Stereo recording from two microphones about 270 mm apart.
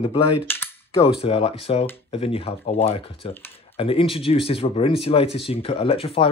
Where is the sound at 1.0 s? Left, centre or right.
Left.